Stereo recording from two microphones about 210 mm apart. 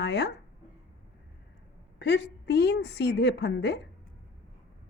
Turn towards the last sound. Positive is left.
turn(degrees=55)  # may be behind; listen again after turning